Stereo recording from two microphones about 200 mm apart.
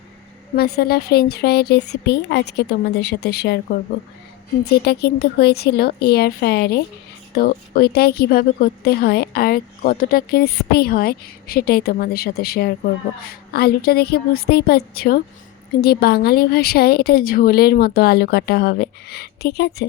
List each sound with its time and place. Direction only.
0.5 s a woman's voice: 50° left (ahead or behind)